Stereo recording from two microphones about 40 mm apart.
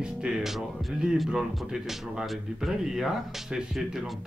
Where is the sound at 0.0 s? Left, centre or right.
Right.